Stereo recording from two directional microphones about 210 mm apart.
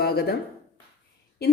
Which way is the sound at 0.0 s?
50° left (ahead or behind).